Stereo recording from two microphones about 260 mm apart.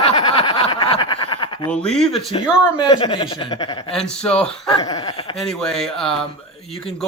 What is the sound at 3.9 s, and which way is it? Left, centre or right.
Speech, centre.